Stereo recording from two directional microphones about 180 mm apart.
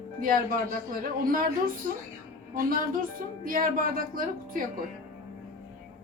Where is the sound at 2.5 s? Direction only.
50° right (ahead or behind).